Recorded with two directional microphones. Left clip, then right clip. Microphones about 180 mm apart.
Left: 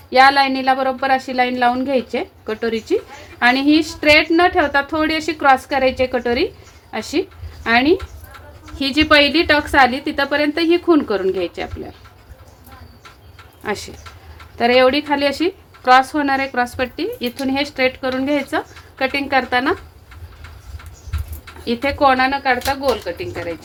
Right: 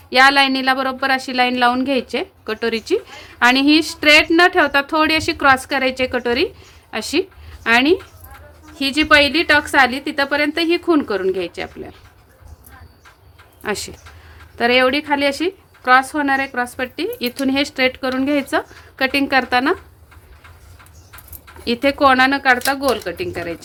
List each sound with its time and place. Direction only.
0.1 s a woman's voice: 15° right (ahead or behind)
13.6 s speech: 25° right (ahead or behind)
14.6 s a woman's voice: 10° right (ahead or behind)
17.0 s speech: 25° right (ahead or behind)
21.6 s speech: 35° right (ahead or behind)